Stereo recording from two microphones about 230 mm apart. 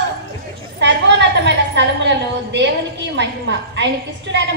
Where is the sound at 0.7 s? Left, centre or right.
Right.